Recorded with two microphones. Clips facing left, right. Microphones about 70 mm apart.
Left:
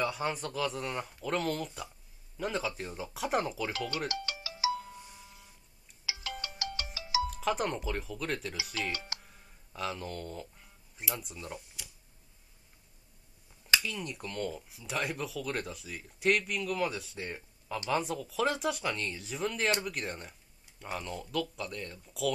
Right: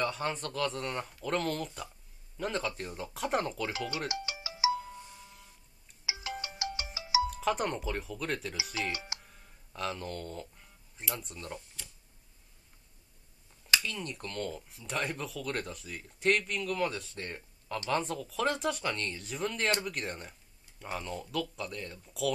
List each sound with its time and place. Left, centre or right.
0.0 s speech: centre
4.1 s ringtone: right
4.9 s music: centre
6.0 s ringtone: right
7.2 s speech: centre
8.9 s speech: centre
9.2 s a sound: centre
13.7 s speech: centre